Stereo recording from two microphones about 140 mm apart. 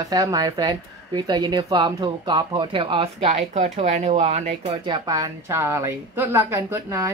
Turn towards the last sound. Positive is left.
turn(degrees=-20)  # may be behind; listen again after turning